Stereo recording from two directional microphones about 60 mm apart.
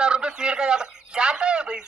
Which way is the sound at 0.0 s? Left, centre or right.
Centre.